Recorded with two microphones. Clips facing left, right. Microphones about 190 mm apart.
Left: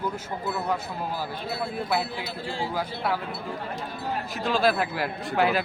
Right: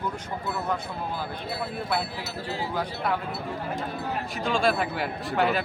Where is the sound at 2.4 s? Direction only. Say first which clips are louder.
Left 1 dB; 30° left (ahead or behind).